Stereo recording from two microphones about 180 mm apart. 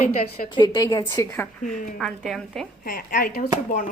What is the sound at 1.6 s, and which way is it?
Speech, 45° left (ahead or behind).